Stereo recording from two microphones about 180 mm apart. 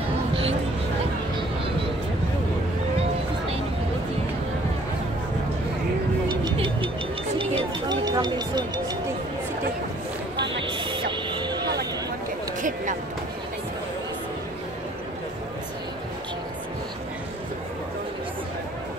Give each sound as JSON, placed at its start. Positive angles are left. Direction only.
{"t": 6.4, "sound": "music", "side_deg": -30}
{"t": 10.7, "sound": "music", "side_deg": -25}